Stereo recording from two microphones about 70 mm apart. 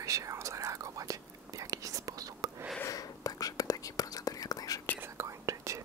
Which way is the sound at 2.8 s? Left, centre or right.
Left.